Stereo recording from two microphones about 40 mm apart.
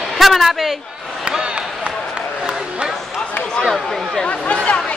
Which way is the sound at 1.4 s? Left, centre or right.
Right.